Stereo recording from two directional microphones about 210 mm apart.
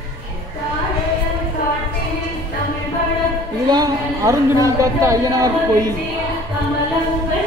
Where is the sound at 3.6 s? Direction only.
20° right (ahead or behind).